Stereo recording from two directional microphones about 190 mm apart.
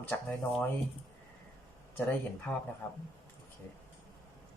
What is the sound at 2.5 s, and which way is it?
Speech, 5° left (ahead or behind).